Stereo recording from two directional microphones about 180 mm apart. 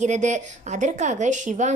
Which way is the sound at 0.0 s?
40° right (ahead or behind).